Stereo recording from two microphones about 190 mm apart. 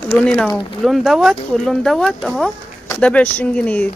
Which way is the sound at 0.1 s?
5° left (ahead or behind).